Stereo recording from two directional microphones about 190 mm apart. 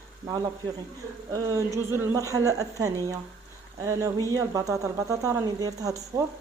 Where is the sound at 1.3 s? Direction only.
15° right (ahead or behind).